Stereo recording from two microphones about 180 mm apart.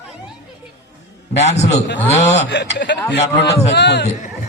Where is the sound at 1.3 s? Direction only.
35° left (ahead or behind).